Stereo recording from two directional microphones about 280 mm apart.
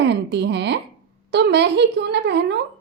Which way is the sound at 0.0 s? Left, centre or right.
Right.